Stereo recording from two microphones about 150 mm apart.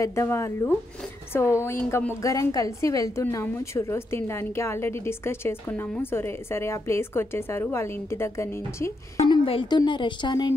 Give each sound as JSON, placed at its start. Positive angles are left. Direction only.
{"t": 0.0, "sound": "a woman's voice", "side_deg": 20}
{"t": 9.3, "sound": "a woman's voice", "side_deg": 35}